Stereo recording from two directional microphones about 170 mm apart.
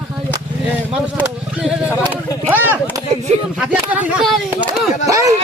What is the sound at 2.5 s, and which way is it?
Speech, 10° right (ahead or behind).